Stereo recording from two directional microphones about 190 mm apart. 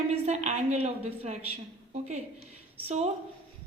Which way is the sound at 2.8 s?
35° right (ahead or behind).